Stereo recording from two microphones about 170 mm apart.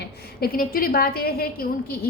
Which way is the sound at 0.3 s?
60° left (ahead or behind).